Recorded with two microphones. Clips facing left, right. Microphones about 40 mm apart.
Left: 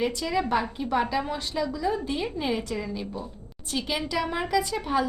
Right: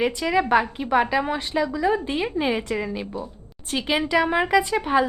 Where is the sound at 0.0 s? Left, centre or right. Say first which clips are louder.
Right 5 dB; right.